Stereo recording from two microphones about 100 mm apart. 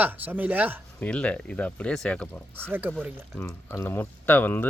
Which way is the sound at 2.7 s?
20° right (ahead or behind).